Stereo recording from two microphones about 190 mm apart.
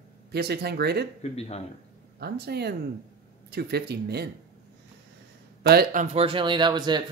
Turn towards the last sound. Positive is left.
turn(degrees=-20)  # may be behind; listen again after turning